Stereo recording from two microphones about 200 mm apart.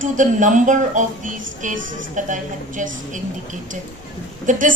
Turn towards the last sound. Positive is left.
turn(degrees=-40)  # may be behind; listen again after turning